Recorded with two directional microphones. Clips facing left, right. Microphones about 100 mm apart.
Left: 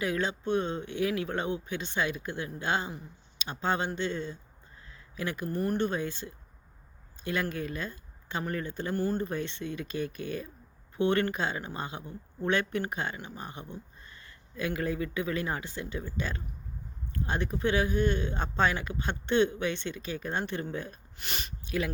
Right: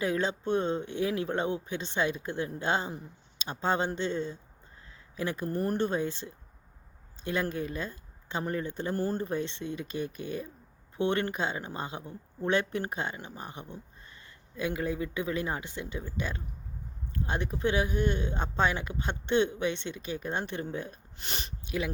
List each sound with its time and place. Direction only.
0.0 s speech: 30° right (ahead or behind)